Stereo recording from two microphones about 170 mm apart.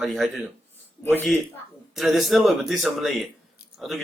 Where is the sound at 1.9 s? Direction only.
Centre (ahead or behind).